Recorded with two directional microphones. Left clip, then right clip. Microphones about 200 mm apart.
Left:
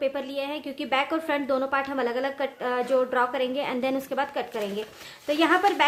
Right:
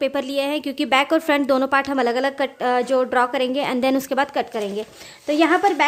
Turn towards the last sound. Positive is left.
turn(degrees=-35)  # may be behind; listen again after turning